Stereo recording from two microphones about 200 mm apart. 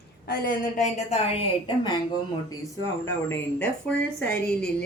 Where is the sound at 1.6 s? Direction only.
25° left (ahead or behind).